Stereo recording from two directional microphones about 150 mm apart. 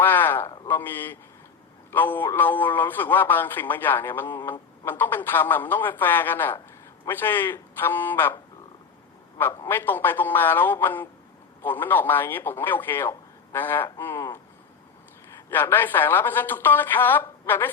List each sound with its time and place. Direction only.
0.0 s a sound: 15° left (ahead or behind)
0.7 s a man's voice: 15° left (ahead or behind)
9.4 s a man's voice: 15° left (ahead or behind)
15.4 s a man's voice: 15° left (ahead or behind)